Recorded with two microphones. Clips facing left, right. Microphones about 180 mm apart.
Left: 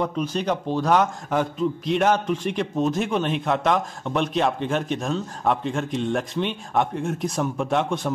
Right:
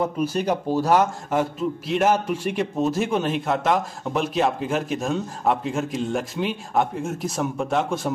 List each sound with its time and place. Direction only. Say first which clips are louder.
0.0 s a man's voice: right 2 dB; 10° right (ahead or behind)